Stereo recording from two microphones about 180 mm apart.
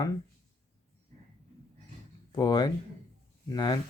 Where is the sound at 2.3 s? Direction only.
25° left (ahead or behind).